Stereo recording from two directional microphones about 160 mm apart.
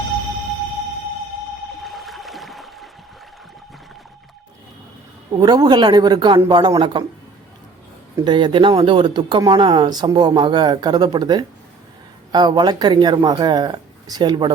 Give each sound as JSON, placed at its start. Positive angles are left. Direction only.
{"t": 1.8, "sound": "a sound", "side_deg": 0}
{"t": 5.4, "sound": "speech", "side_deg": -25}
{"t": 8.2, "sound": "speech", "side_deg": -30}